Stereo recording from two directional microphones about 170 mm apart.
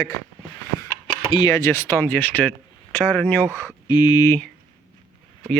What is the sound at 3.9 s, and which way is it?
Speech, 25° left (ahead or behind).